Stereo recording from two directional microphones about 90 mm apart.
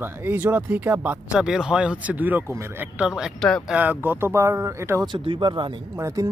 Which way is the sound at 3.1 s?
5° right (ahead or behind).